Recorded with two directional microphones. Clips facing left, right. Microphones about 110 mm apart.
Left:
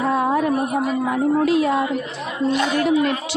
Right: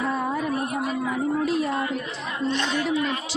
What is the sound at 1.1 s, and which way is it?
Speech, 90° left.